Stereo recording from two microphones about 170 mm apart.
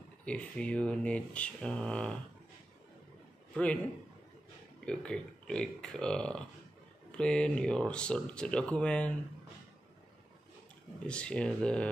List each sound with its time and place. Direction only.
0.2 s speech: 5° left (ahead or behind)
3.5 s speech: 5° left (ahead or behind)
4.8 s speech: 5° left (ahead or behind)
11.1 s speech: 5° left (ahead or behind)